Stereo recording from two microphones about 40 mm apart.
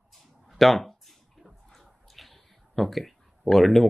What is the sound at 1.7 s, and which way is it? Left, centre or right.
Speech, centre.